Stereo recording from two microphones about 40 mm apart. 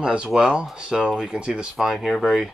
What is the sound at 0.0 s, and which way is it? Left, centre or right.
Speech, right.